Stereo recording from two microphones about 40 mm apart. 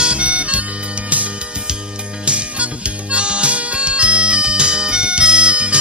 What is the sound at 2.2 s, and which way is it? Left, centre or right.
Music, right.